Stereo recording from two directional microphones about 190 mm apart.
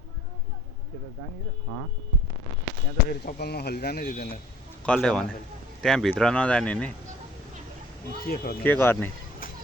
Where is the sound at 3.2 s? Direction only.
55° left (ahead or behind).